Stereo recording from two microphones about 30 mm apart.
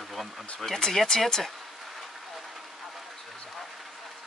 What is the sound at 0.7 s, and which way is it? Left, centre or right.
Speech, left.